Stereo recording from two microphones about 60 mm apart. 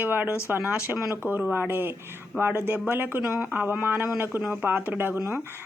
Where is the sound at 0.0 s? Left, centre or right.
Right.